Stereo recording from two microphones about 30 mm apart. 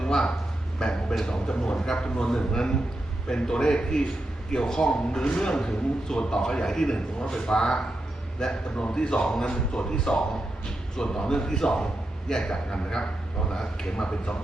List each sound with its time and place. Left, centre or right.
0.0 s a sound: left
0.8 s speech: left
8.7 s speech: left
13.9 s speech: left